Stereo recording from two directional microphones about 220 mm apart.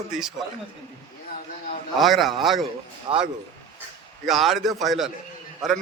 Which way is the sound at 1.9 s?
Centre (ahead or behind).